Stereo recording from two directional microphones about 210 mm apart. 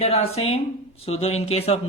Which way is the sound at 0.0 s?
30° left (ahead or behind).